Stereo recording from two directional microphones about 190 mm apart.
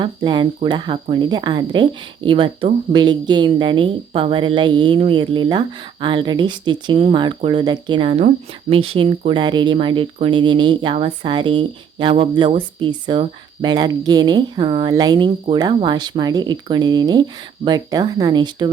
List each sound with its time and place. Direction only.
0.0 s speech: 25° right (ahead or behind)